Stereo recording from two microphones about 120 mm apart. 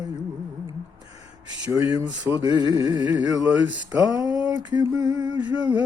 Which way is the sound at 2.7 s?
30° right (ahead or behind).